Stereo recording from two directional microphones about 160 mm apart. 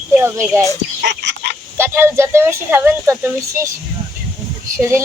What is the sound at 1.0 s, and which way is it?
Fowl, 90° right.